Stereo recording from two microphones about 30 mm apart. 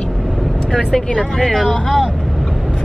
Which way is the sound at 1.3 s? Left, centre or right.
Centre.